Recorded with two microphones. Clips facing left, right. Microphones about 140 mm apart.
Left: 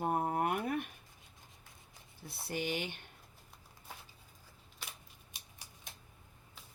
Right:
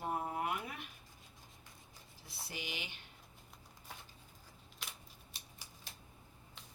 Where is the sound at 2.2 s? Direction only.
55° left (ahead or behind).